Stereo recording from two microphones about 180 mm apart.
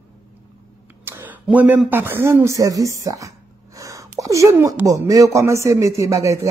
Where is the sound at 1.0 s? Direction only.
10° right (ahead or behind).